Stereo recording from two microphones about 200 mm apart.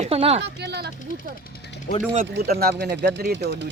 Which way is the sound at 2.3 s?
50° right (ahead or behind).